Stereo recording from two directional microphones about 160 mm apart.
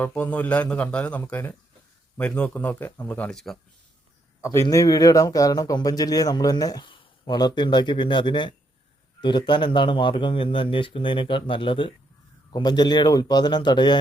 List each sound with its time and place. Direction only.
0.0 s a man's voice: 10° left (ahead or behind)
4.4 s speech: 20° left (ahead or behind)